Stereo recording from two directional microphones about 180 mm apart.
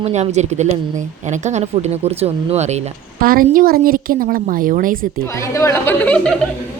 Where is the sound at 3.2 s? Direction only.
50° right (ahead or behind).